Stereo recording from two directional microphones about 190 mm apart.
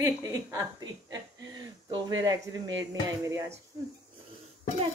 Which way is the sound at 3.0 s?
20° right (ahead or behind).